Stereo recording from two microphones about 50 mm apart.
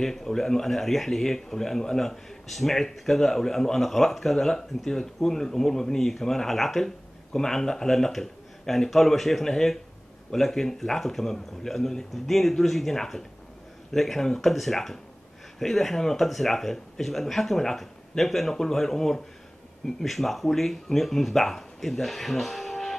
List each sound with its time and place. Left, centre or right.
0.0 s speech: centre